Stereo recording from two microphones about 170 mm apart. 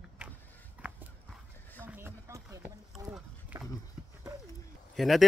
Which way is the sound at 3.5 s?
10° right (ahead or behind).